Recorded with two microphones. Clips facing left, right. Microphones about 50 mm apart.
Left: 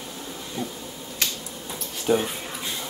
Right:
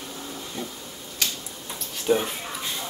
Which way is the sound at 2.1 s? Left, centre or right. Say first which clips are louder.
Even; centre.